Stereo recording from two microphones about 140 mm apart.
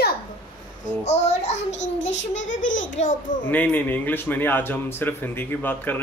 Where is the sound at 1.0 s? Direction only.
50° left (ahead or behind).